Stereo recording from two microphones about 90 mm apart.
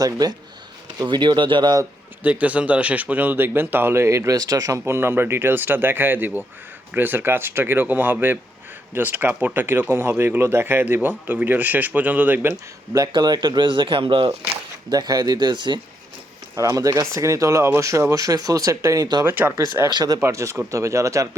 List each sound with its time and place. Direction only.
0.0 s speech: 45° right (ahead or behind)
0.9 s speech: 55° right (ahead or behind)
2.2 s speech: 15° right (ahead or behind); by 4.8 s 40° right (ahead or behind)
4.9 s speech: 25° right (ahead or behind)
12.9 s speech: 45° right (ahead or behind); by 14.3 s 80° right
14.8 s speech: 45° right (ahead or behind)
16.6 s speech: 40° right (ahead or behind)
19.2 s speech: 25° right (ahead or behind)
19.9 s speech: 55° right (ahead or behind)
20.2 s speech: 35° right (ahead or behind)